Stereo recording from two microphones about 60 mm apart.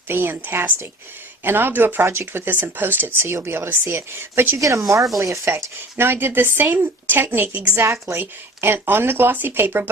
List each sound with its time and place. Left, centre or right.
0.1 s speech: right
2.0 s speech: right
4.5 s speech: right
5.5 s speech: right